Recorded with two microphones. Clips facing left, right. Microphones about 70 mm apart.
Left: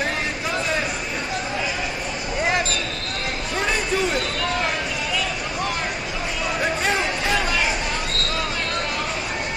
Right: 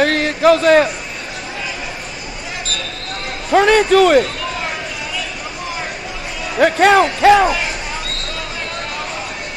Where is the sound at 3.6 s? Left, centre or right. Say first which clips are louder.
Right 13 dB; right.